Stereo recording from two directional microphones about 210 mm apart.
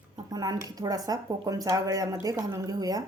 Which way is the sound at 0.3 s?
20° right (ahead or behind).